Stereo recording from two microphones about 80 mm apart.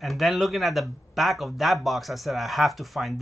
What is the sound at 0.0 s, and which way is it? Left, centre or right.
Speech, centre.